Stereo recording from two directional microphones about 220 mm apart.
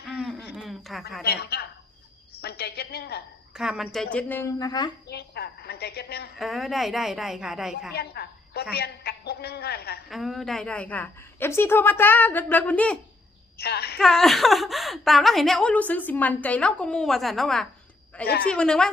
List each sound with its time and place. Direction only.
0.0 s a sound: 5° right (ahead or behind)
0.5 s a woman's voice: centre (ahead or behind)
1.2 s a woman's voice: 45° left (ahead or behind)
2.4 s a sound: 45° left (ahead or behind)
3.5 s a woman's voice: 5° right (ahead or behind); by 4.9 s 15° left (ahead or behind)
5.0 s a sound: 45° left (ahead or behind)
6.4 s a woman's voice: centre (ahead or behind)
7.9 s a sound: 45° left (ahead or behind)
8.7 s a woman's voice: 45° left (ahead or behind)
10.1 s a woman's voice: centre (ahead or behind)
13.6 s a woman's voice: 45° left (ahead or behind)
14.0 s a woman's voice: centre (ahead or behind)